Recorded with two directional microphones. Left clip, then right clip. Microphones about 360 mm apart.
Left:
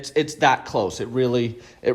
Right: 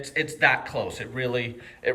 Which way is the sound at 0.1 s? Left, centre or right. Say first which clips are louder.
Left 3 dB; centre.